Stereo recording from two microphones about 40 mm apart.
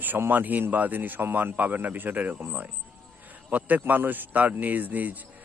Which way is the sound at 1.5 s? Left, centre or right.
Right.